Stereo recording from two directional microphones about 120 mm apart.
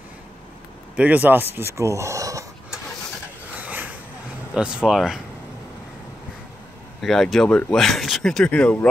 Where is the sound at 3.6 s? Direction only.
15° right (ahead or behind).